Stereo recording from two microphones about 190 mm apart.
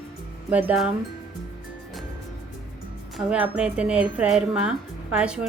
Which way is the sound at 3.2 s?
5° right (ahead or behind).